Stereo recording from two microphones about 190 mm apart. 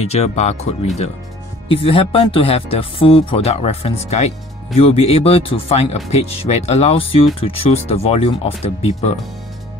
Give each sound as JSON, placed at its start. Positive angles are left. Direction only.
{"t": 0.0, "sound": "speech", "side_deg": 35}